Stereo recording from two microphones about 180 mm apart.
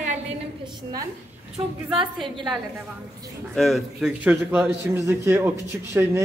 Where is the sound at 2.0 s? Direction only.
25° right (ahead or behind).